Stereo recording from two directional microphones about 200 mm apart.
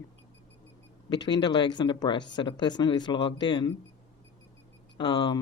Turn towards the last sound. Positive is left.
turn(degrees=20)  # may be behind; listen again after turning